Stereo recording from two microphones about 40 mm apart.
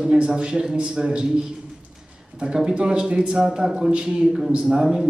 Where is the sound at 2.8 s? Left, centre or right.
Right.